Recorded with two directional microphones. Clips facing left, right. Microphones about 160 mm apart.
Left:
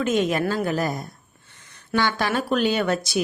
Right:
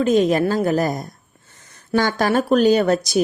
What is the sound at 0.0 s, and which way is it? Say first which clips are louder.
A woman's voice: right 6 dB; 35° right (ahead or behind).